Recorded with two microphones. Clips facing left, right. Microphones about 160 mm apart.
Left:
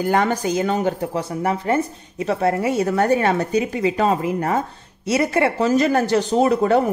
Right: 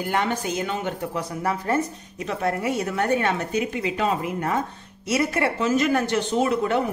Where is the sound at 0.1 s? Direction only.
40° left (ahead or behind).